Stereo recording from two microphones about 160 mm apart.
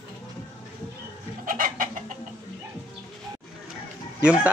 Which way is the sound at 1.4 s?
60° right (ahead or behind).